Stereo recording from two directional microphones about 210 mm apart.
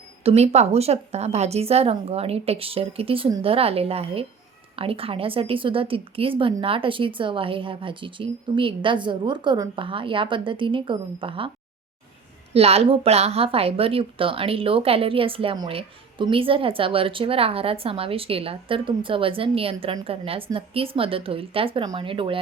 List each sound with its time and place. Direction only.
0.2 s speech: 30° right (ahead or behind)
12.5 s speech: 30° right (ahead or behind)